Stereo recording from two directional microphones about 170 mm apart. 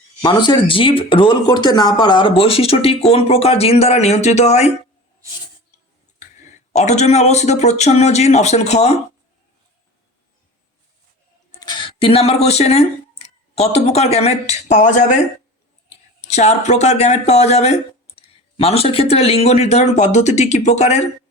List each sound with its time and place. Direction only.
0.2 s speech: 25° left (ahead or behind); by 4.7 s 40° left (ahead or behind)
6.7 s speech: 40° left (ahead or behind)
11.6 s speech: 30° left (ahead or behind); by 15.2 s 45° left (ahead or behind)
16.2 s speech: 40° left (ahead or behind)